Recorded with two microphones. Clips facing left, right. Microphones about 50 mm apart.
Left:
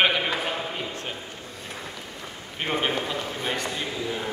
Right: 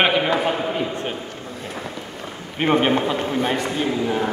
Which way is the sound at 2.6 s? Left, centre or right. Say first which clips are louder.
Right 8 dB; right.